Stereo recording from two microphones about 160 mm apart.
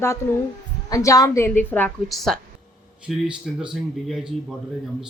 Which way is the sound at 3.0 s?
5° right (ahead or behind).